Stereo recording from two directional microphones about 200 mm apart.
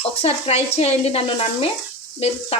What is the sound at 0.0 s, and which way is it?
Speech, 30° left (ahead or behind).